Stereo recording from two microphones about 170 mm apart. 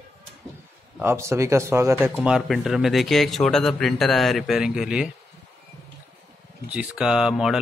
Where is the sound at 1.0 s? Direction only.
15° right (ahead or behind).